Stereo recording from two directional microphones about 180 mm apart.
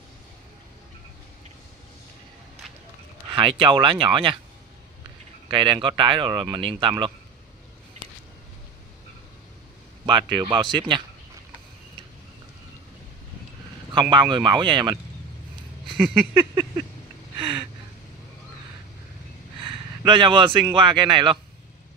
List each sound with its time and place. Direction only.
3.3 s speech: 25° right (ahead or behind)
5.5 s speech: 30° right (ahead or behind)
10.0 s speech: 25° right (ahead or behind)
14.1 s speech: 25° right (ahead or behind)
16.0 s a sound: 10° right (ahead or behind)
17.4 s a sound: 25° right (ahead or behind)
19.6 s a man's voice: 25° right (ahead or behind)